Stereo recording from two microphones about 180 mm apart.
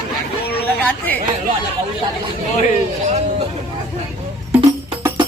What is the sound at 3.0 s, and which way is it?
Speech, 40° right (ahead or behind).